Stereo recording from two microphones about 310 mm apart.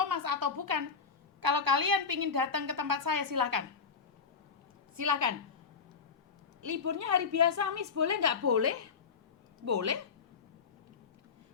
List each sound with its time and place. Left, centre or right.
0.0 s a sound: right
1.4 s a woman's voice: right
4.9 s a woman's voice: right
6.6 s a woman's voice: right